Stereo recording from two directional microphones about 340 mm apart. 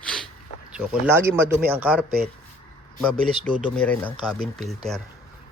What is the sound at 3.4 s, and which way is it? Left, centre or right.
Speech, centre.